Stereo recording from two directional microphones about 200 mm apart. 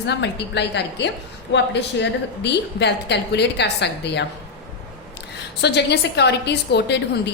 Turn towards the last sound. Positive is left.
turn(degrees=55)  # may be behind; listen again after turning